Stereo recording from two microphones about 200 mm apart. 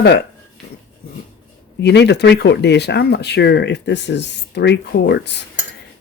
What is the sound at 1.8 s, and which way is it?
Speech, 60° left (ahead or behind).